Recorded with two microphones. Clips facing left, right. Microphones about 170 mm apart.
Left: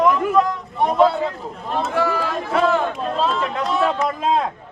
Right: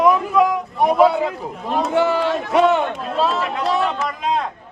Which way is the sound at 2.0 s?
25° right (ahead or behind).